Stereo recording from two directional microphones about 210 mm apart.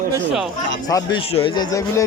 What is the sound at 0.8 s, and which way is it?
A man's voice, 15° left (ahead or behind).